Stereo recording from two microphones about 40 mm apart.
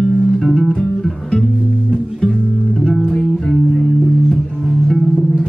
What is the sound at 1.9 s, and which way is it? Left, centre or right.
Music, left.